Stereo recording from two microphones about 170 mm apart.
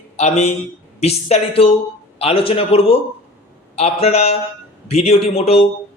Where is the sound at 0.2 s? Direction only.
40° left (ahead or behind).